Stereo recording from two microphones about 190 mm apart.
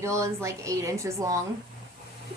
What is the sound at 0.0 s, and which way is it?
Speech, 15° right (ahead or behind).